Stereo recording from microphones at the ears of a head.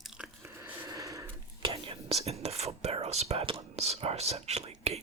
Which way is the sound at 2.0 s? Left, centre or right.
Right.